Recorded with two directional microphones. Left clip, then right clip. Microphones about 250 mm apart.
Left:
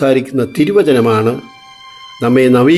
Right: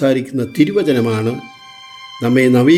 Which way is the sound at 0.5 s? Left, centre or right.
Centre.